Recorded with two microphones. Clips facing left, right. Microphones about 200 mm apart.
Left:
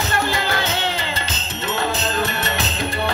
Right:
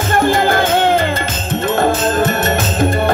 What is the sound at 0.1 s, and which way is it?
Music, 50° right (ahead or behind).